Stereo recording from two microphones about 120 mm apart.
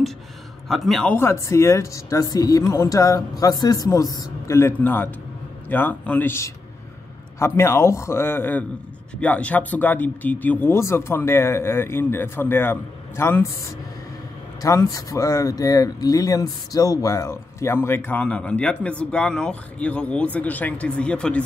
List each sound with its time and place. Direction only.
0.7 s a man's voice: centre (ahead or behind)
1.1 s speech: 20° left (ahead or behind)
14.6 s speech: 25° left (ahead or behind); by 21.4 s 10° left (ahead or behind)